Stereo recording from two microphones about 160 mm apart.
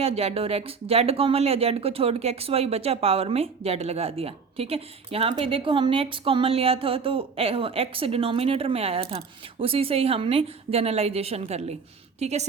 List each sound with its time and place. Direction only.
0.0 s a woman's voice: 40° right (ahead or behind)